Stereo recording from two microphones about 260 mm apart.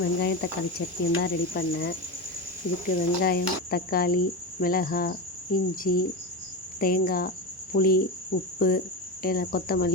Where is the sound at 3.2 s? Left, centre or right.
Left.